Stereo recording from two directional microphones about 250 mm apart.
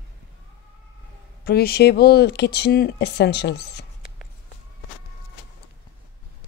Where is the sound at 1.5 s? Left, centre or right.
Left.